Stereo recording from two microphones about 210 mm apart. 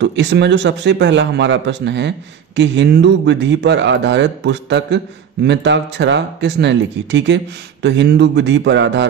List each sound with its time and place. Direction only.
0.0 s speech: 55° right (ahead or behind)